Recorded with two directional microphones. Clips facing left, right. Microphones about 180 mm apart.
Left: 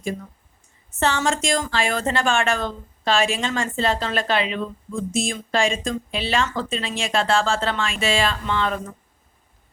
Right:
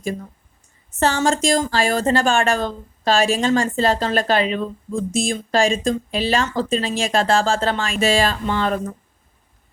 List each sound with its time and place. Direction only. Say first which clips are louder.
0.9 s speech: right 3 dB; 40° right (ahead or behind)